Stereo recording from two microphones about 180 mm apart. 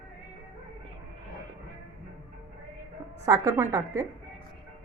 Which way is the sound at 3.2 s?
20° right (ahead or behind).